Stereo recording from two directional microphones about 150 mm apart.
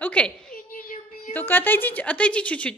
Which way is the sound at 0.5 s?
70° left (ahead or behind).